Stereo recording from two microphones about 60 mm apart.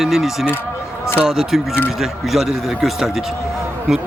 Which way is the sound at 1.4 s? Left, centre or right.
Centre.